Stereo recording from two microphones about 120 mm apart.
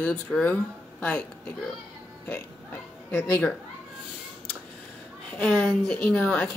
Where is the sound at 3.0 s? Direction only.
15° left (ahead or behind).